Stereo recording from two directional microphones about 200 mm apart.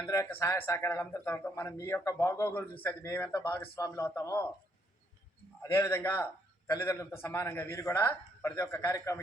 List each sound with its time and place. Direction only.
0.1 s a man's voice: 10° left (ahead or behind)
3.4 s a man's voice: 20° left (ahead or behind)
5.7 s a man's voice: 10° left (ahead or behind)